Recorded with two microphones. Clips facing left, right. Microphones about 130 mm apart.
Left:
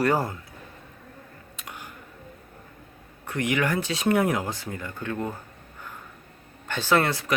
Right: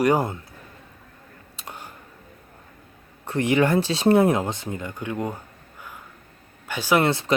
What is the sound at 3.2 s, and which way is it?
Speech, 30° right (ahead or behind).